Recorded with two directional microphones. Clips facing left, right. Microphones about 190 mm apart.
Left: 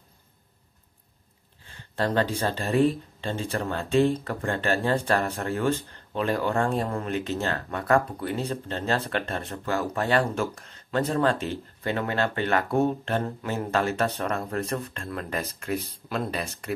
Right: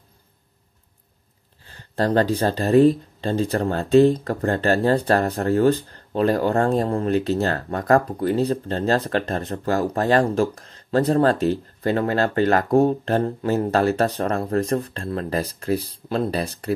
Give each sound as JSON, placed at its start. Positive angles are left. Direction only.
{"t": 1.6, "sound": "speech", "side_deg": -35}